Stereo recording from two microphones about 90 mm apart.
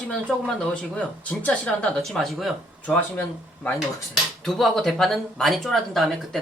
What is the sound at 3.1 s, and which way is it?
Speech, 20° left (ahead or behind).